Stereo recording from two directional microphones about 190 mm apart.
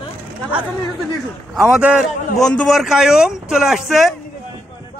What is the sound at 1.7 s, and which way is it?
A man's voice, 5° right (ahead or behind).